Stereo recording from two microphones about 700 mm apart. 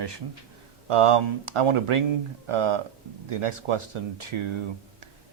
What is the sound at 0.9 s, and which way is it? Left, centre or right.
Speech, right.